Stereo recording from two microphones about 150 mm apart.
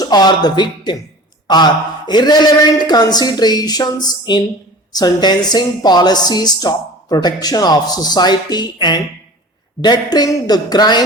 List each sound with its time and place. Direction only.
0.0 s speech: 25° left (ahead or behind)